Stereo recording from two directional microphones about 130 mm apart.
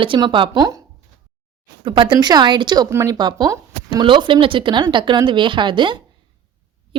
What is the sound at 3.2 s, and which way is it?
Speech, 35° right (ahead or behind).